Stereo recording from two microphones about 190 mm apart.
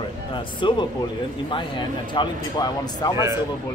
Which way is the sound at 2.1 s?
25° left (ahead or behind).